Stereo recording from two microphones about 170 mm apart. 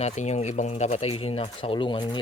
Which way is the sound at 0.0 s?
40° left (ahead or behind).